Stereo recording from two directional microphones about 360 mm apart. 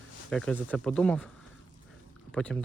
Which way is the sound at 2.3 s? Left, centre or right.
Centre.